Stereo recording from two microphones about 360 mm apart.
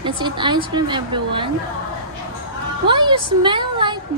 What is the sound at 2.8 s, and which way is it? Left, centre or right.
A woman's voice, centre.